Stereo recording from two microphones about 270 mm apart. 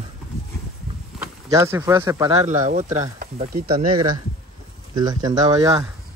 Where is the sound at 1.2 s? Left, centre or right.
Centre.